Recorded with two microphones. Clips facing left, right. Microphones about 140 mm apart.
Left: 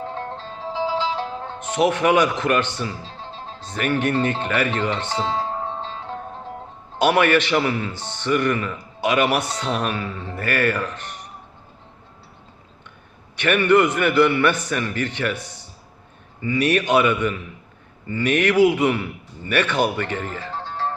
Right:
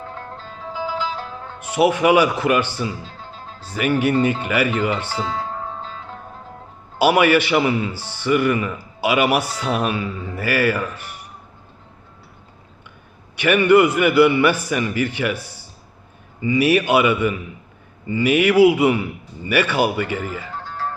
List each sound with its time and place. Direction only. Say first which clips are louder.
0.0 s music: left 4 dB; 25° left (ahead or behind)
1.5 s a man's voice: right 3 dB; 10° right (ahead or behind)
3.0 s music: left 1 dB; 30° left (ahead or behind)
3.6 s a man's voice: right 3 dB; 10° right (ahead or behind)
5.1 s music: left 1 dB; 30° left (ahead or behind)
7.0 s a man's voice: right 2 dB; 10° right (ahead or behind)
13.3 s a man's voice: right 3 dB; 10° right (ahead or behind)
20.5 s music: left 1 dB; 30° left (ahead or behind)